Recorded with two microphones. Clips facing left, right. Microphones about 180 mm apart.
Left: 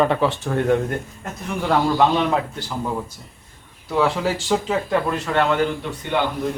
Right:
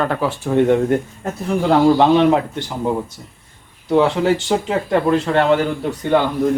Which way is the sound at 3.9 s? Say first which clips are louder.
Right 6 dB; 25° right (ahead or behind).